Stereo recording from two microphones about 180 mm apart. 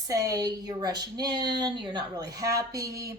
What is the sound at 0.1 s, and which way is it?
Speech, 20° right (ahead or behind).